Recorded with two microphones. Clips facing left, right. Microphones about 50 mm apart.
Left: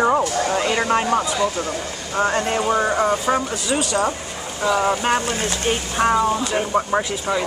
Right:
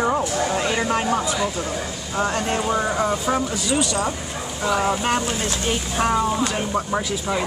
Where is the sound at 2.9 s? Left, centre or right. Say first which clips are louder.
Left 2 dB; left.